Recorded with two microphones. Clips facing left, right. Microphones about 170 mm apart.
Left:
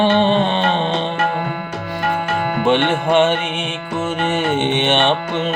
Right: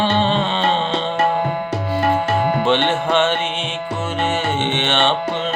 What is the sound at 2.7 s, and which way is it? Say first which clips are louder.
Music: left 5 dB; 15° left (ahead or behind).